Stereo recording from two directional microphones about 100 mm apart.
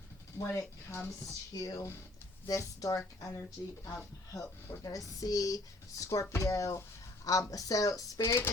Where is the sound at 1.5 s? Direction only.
35° left (ahead or behind).